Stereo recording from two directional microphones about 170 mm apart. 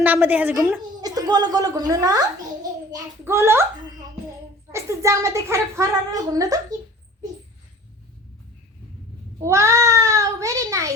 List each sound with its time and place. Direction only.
0.0 s a child's voice: 10° right (ahead or behind)
1.0 s a child's voice: 25° right (ahead or behind)
4.7 s a child's voice: 15° right (ahead or behind)
9.4 s a child's voice: 20° right (ahead or behind)